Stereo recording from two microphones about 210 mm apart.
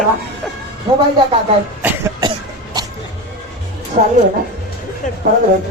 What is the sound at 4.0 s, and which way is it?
Speech, 35° right (ahead or behind).